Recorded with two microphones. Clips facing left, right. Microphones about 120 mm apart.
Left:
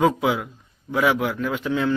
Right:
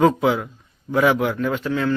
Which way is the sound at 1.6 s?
15° left (ahead or behind).